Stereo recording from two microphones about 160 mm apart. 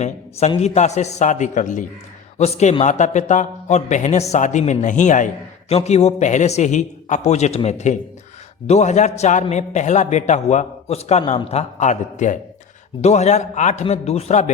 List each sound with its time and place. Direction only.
0.0 s a man's voice: 40° left (ahead or behind)